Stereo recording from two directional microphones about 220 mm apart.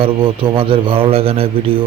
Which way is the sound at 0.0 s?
25° right (ahead or behind).